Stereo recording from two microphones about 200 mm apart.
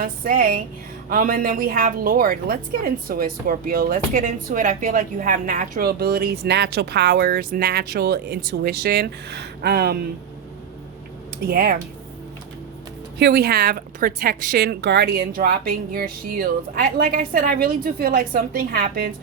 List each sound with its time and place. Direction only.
0.0 s a woman's voice: 45° right (ahead or behind)
11.4 s a woman's voice: 50° right (ahead or behind)
13.1 s a woman's voice: 55° right (ahead or behind)